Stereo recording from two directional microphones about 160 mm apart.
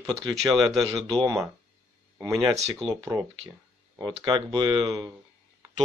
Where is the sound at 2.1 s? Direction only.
20° right (ahead or behind).